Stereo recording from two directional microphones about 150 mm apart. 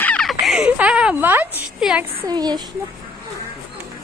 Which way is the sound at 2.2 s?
25° right (ahead or behind).